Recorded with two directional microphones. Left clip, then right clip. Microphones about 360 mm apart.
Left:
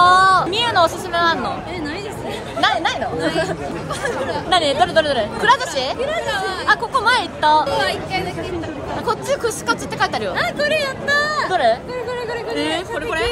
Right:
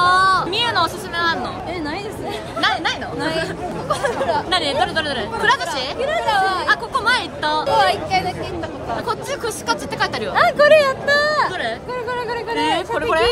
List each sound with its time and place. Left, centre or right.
0.0 s a sound: centre
2.6 s chatter: centre
3.9 s speech: centre
4.5 s speech: centre
5.9 s speech: centre
6.6 s speech: centre
7.6 s speech: centre
9.0 s speech: centre
10.3 s speech: centre
11.5 s speech: centre
12.7 s speech: centre